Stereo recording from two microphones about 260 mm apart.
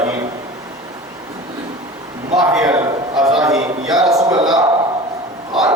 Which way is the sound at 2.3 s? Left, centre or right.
Centre.